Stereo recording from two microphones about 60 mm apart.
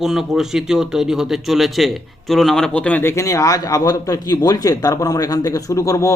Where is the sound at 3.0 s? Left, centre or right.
Left.